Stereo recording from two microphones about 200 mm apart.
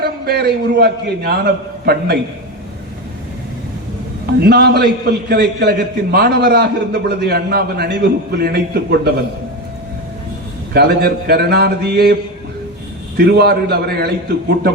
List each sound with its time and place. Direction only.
0.0 s a man's voice: 50° right (ahead or behind)
4.4 s a man's voice: 50° right (ahead or behind)
10.8 s a man's voice: 50° right (ahead or behind)
13.1 s a man's voice: 55° right (ahead or behind)